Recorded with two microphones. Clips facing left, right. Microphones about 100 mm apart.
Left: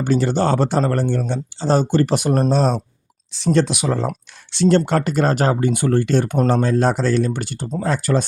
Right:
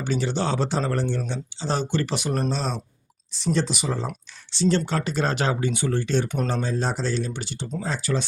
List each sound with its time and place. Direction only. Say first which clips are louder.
0.0 s speech: left 7 dB; 50° left (ahead or behind)
3.3 s speech: left 7 dB; 65° left (ahead or behind)
4.9 s speech: left 7 dB; 55° left (ahead or behind)